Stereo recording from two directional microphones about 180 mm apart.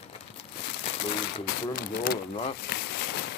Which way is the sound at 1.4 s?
55° left (ahead or behind).